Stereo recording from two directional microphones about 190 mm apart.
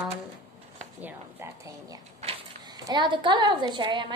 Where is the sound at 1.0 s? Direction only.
10° right (ahead or behind).